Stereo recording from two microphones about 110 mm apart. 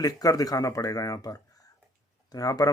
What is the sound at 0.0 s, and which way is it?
Speech, 35° left (ahead or behind).